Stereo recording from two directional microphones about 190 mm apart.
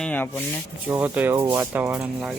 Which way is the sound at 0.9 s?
10° right (ahead or behind).